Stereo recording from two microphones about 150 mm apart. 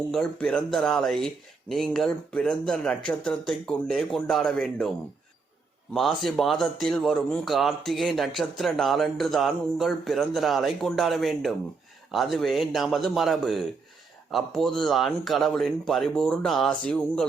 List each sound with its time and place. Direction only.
0.1 s a man's voice: 5° left (ahead or behind)
5.9 s a man's voice: centre (ahead or behind)